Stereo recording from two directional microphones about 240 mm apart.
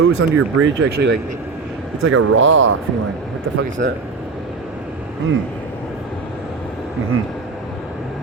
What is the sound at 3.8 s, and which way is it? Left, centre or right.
Speech, right.